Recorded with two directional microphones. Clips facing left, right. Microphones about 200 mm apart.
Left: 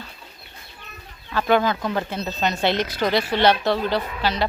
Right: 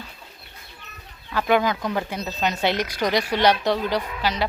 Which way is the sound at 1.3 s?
15° right (ahead or behind).